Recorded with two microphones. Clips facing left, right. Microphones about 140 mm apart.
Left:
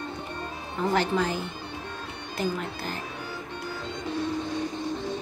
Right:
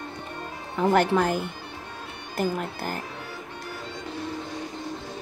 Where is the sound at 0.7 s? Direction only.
55° right (ahead or behind).